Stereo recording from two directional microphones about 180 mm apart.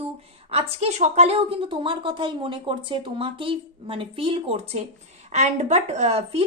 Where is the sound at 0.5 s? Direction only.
35° right (ahead or behind).